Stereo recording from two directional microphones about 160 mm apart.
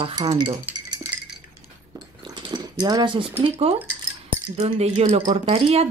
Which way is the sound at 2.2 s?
30° right (ahead or behind).